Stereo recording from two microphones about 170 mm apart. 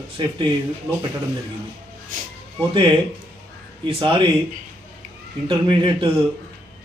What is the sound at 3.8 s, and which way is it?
Speech, 30° right (ahead or behind).